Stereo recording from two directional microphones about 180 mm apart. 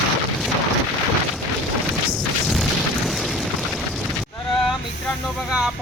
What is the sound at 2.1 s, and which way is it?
Boom, centre (ahead or behind).